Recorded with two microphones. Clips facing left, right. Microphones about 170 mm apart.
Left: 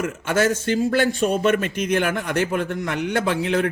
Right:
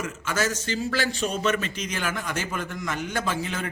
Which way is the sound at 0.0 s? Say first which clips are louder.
Left 7 dB; 60° left (ahead or behind).